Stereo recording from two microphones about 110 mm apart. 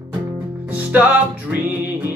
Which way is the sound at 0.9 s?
15° right (ahead or behind).